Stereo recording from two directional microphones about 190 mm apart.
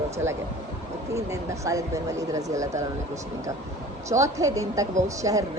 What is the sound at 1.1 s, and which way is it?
A woman's voice, 15° right (ahead or behind).